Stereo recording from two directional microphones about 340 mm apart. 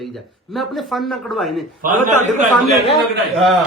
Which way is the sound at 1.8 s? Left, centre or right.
Right.